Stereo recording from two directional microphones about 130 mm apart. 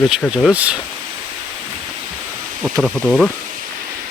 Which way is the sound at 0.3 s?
10° right (ahead or behind).